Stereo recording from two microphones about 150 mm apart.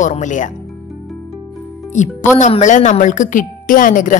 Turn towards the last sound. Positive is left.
turn(degrees=60)  # may be behind; listen again after turning